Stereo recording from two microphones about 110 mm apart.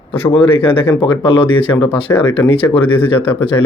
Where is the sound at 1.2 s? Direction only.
50° left (ahead or behind).